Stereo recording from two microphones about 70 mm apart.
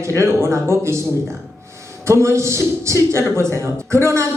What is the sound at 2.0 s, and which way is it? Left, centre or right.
A woman's voice, right.